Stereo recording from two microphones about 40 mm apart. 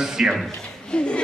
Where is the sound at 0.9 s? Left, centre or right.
Left.